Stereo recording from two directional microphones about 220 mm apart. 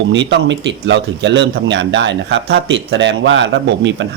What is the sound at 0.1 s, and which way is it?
Speech, 55° right (ahead or behind).